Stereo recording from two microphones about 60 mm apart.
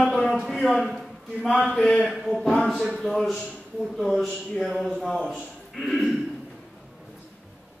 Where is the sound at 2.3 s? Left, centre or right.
Centre.